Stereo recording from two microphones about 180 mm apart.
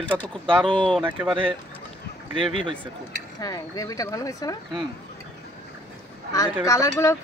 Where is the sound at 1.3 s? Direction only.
30° right (ahead or behind).